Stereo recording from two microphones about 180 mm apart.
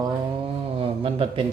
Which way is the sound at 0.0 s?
30° right (ahead or behind).